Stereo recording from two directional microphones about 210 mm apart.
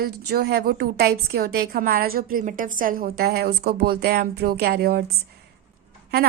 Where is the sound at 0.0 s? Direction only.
50° right (ahead or behind).